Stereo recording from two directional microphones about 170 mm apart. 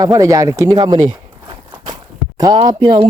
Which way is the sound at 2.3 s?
25° right (ahead or behind).